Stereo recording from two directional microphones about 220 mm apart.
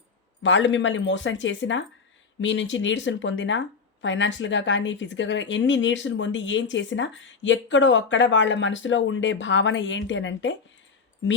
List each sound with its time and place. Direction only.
0.4 s speech: 55° left (ahead or behind)